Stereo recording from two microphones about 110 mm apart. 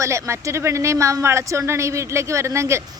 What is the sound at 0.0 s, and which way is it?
Speech, 25° right (ahead or behind).